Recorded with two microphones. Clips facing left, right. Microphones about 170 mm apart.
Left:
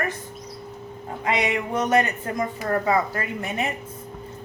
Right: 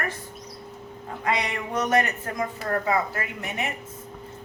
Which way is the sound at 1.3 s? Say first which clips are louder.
Left 3 dB; 25° left (ahead or behind).